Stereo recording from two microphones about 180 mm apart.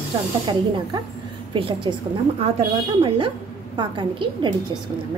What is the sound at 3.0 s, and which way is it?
A woman's voice, 30° right (ahead or behind).